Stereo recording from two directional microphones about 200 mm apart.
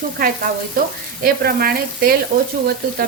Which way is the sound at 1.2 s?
45° right (ahead or behind).